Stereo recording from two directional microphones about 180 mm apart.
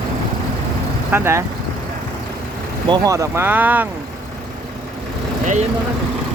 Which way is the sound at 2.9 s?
15° right (ahead or behind).